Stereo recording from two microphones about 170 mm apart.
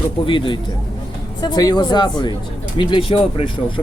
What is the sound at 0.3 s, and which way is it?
Speech, 30° left (ahead or behind).